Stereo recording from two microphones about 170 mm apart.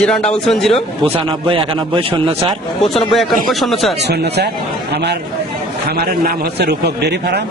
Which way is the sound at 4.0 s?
75° right (ahead or behind).